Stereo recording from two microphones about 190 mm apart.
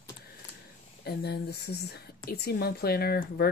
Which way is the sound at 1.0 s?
60° left (ahead or behind).